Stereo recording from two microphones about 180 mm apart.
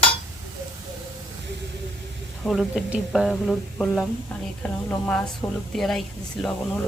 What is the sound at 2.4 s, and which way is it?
A woman's voice, centre (ahead or behind).